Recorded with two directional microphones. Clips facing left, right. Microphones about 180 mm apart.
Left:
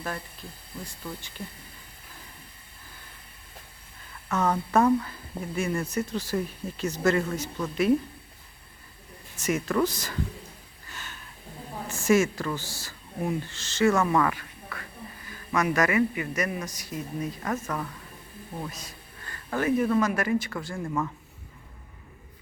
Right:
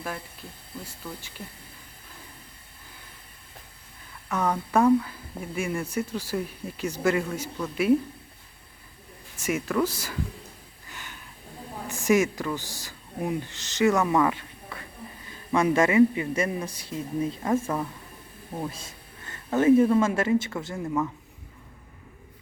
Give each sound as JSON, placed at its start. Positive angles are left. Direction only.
{"t": 0.9, "sound": "speech", "side_deg": -5}
{"t": 4.3, "sound": "speech", "side_deg": -10}
{"t": 9.4, "sound": "speech", "side_deg": -10}
{"t": 10.8, "sound": "a sound", "side_deg": -15}
{"t": 11.9, "sound": "a man's voice", "side_deg": -15}